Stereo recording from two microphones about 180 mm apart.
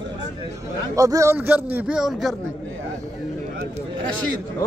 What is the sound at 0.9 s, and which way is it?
Speech, 20° right (ahead or behind).